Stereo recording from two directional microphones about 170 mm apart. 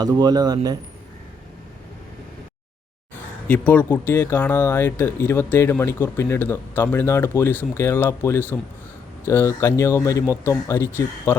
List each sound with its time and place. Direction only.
0.0 s speech: 25° right (ahead or behind)
3.4 s speech: 10° left (ahead or behind)